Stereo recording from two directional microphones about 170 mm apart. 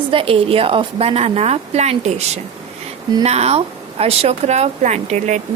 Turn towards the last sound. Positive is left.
turn(degrees=-45)  # may be behind; listen again after turning